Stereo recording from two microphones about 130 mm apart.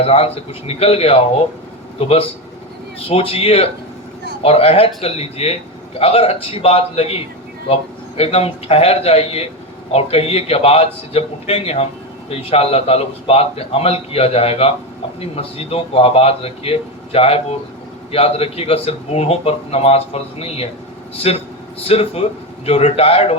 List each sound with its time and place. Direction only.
0.0 s speech: 50° left (ahead or behind)